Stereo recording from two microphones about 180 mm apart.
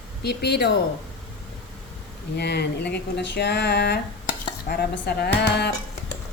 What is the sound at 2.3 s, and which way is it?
Speech, 70° left (ahead or behind).